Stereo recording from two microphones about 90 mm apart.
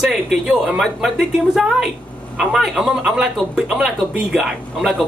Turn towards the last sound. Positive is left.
turn(degrees=-5)  # may be behind; listen again after turning